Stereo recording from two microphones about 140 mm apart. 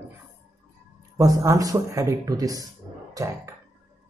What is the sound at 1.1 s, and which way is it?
Speech, 25° right (ahead or behind).